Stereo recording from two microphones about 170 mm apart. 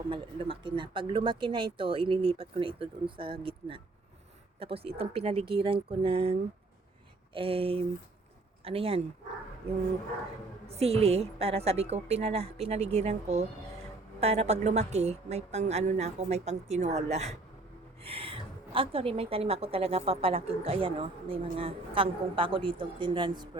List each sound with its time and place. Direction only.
0.1 s a woman's voice: 30° right (ahead or behind)
7.3 s a woman's voice: 30° right (ahead or behind)
10.7 s a woman's voice: 35° right (ahead or behind)